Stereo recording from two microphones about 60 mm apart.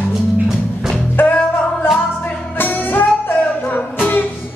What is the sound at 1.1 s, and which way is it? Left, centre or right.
Music, left.